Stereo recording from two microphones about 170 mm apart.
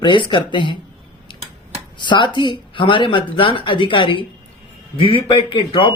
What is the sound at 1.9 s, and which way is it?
Speech, 25° left (ahead or behind).